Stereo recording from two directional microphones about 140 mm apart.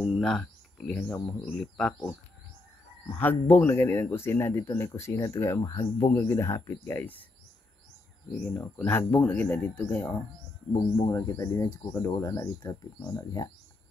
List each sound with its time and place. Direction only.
0.2 s speech: 5° left (ahead or behind)
3.1 s speech: 10° left (ahead or behind)
8.3 s speech: 10° left (ahead or behind)
10.7 s speech: 20° left (ahead or behind)